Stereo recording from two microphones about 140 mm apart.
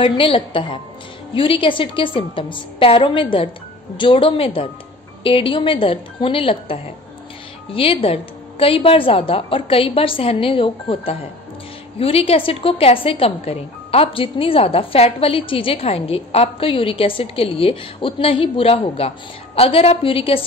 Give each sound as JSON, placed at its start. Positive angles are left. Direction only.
{"t": 0.0, "sound": "a woman's voice", "side_deg": 40}